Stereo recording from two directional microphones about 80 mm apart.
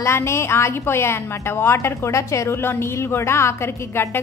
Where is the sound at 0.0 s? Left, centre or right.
Left.